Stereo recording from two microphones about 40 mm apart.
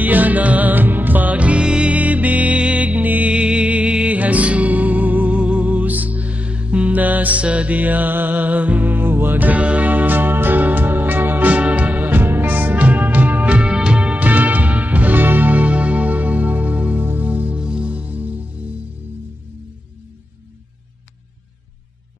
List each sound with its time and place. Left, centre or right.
0.0 s music: right
1.6 s music: centre
1.9 s music: right
3.3 s music: right
9.5 s music: right
11.5 s music: right
13.6 s music: right
14.1 s music: right
17.6 s music: right